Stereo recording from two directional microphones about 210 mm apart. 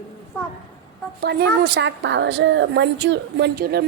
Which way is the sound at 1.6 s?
55° right (ahead or behind).